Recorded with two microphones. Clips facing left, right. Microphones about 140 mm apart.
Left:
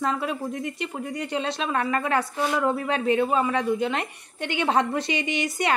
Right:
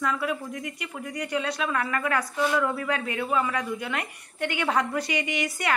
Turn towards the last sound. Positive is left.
turn(degrees=25)  # may be behind; listen again after turning